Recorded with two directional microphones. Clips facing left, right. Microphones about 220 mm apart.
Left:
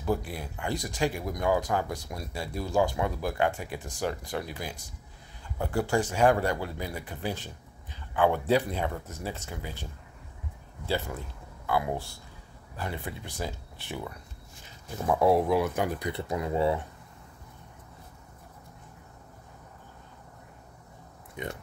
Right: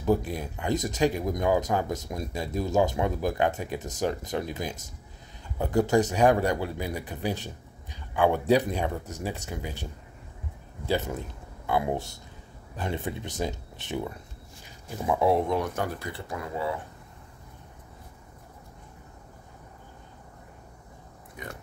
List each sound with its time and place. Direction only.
0.0 s speech: 15° right (ahead or behind)
10.9 s speech: 20° right (ahead or behind)
15.0 s speech: centre (ahead or behind); by 16.7 s 25° left (ahead or behind)